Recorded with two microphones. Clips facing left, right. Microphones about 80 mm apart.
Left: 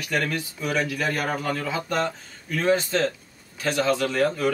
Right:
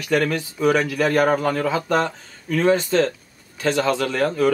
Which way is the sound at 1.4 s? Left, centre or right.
Right.